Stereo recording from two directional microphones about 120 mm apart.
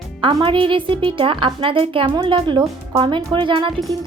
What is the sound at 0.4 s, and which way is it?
Speech, 45° right (ahead or behind).